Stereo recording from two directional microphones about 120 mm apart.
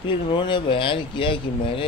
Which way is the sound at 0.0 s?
40° left (ahead or behind).